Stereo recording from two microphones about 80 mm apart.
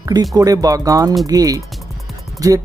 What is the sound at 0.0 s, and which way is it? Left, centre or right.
Speech, right.